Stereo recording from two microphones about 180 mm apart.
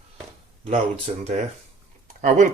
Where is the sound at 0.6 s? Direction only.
35° right (ahead or behind).